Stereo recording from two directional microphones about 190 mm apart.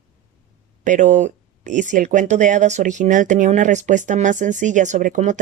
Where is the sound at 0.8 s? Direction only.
40° right (ahead or behind).